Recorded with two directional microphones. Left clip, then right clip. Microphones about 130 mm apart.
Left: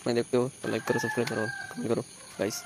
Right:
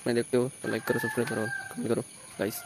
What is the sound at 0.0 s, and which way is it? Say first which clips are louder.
Speech: even; 15° right (ahead or behind).